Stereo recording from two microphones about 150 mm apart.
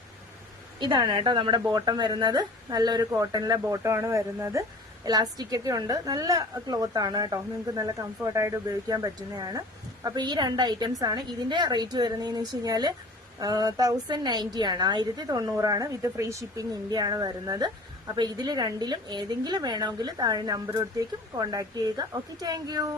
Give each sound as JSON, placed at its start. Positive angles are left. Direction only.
{"t": 0.8, "sound": "a woman's voice", "side_deg": -30}